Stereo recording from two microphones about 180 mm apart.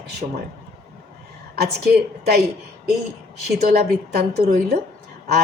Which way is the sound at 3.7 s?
60° right (ahead or behind).